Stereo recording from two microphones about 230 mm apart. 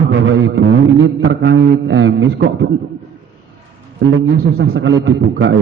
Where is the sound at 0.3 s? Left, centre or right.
Right.